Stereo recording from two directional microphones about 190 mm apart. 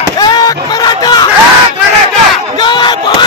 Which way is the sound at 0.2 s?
20° left (ahead or behind).